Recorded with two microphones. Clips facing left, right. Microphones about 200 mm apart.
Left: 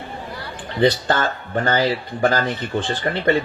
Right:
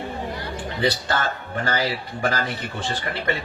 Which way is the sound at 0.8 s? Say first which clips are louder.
Left 6 dB; 35° left (ahead or behind).